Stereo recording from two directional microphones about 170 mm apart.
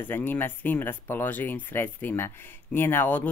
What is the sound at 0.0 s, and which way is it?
Speech, 10° left (ahead or behind).